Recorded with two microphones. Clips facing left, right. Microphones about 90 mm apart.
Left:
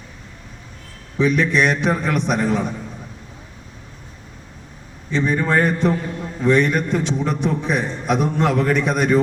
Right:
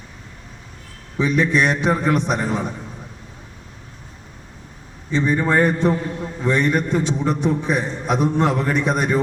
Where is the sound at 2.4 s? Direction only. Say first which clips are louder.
Left 3 dB; 15° right (ahead or behind).